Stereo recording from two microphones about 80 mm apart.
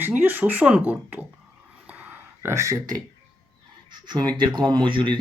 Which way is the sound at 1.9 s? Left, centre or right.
Right.